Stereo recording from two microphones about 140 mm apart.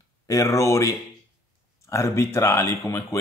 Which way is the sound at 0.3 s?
20° left (ahead or behind).